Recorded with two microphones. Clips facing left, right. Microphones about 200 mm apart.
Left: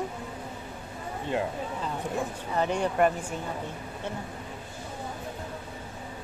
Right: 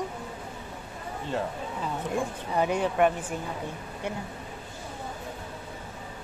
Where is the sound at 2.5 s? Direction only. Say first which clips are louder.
Right 1 dB; 10° right (ahead or behind).